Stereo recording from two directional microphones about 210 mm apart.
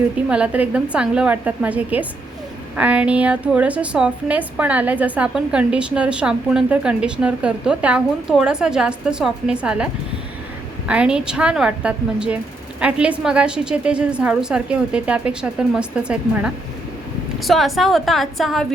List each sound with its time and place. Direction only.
0.3 s a woman's voice: 5° right (ahead or behind)